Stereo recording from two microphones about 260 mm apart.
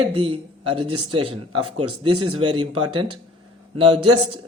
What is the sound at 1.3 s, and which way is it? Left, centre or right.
A man's voice, right.